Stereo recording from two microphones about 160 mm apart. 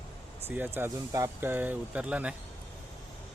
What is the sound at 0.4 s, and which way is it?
Speech, 10° right (ahead or behind).